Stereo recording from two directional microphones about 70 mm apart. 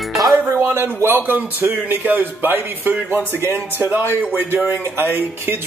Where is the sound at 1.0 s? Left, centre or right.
Right.